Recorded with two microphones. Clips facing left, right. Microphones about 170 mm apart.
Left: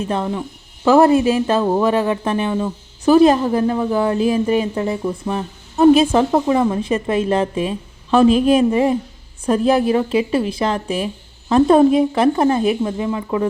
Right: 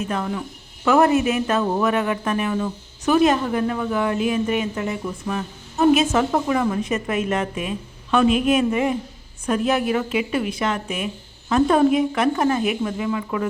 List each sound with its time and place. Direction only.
0.0 s a woman's voice: 30° left (ahead or behind)